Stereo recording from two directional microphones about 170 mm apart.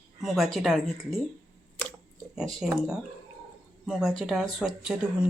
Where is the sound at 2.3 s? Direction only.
Centre (ahead or behind).